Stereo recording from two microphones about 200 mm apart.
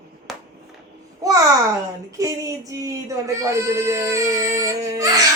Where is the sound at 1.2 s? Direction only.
15° right (ahead or behind).